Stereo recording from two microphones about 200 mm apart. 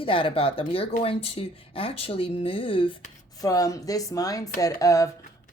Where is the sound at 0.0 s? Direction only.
25° left (ahead or behind).